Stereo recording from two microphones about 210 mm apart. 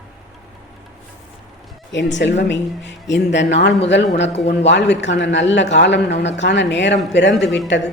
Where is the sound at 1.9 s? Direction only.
60° left (ahead or behind).